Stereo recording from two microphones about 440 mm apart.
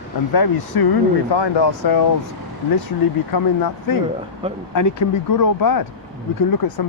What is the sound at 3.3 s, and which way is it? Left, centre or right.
Speech, left.